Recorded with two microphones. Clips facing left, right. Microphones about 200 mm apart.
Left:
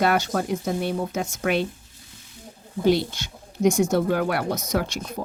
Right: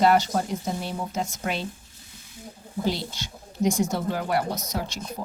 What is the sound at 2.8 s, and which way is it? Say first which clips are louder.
Speech: left 9 dB; 60° left (ahead or behind).